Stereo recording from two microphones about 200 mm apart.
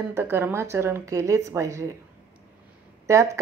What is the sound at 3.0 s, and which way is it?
Speech, 15° right (ahead or behind).